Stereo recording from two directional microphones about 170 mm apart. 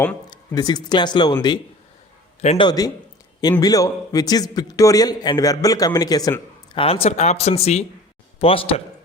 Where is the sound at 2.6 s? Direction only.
20° left (ahead or behind).